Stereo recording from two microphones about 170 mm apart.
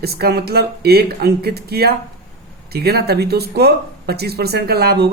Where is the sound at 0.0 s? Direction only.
70° right (ahead or behind).